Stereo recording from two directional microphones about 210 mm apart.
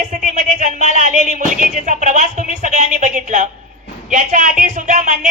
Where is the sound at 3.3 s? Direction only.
35° right (ahead or behind).